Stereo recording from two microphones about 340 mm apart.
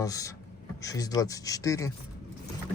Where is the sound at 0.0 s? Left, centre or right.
Centre.